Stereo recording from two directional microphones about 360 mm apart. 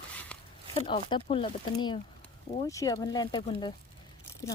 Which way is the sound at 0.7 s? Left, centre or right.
Centre.